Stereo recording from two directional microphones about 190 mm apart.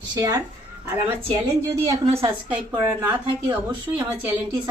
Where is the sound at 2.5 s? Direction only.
5° right (ahead or behind).